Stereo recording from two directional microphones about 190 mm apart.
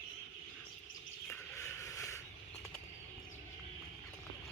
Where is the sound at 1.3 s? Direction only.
15° left (ahead or behind).